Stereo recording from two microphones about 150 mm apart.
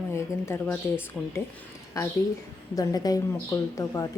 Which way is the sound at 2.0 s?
20° left (ahead or behind).